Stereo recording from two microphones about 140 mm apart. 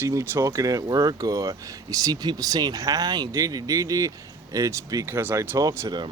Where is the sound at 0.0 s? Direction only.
20° right (ahead or behind).